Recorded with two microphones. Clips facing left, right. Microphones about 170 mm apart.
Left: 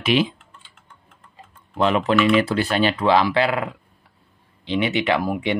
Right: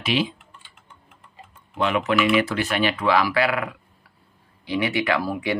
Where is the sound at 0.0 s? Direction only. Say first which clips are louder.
Left 4 dB; 55° left (ahead or behind).